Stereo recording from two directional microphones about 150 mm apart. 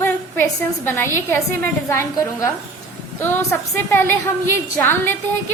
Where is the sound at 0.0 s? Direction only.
15° left (ahead or behind).